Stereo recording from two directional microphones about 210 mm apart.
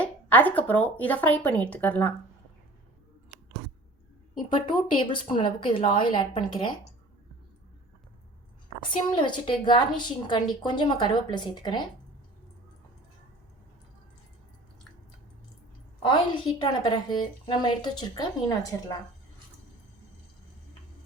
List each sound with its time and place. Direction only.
0.0 s speech: 10° left (ahead or behind)
4.9 s a woman's voice: 25° left (ahead or behind)
8.8 s a woman's voice: 20° left (ahead or behind)
16.0 s a woman's voice: 20° left (ahead or behind)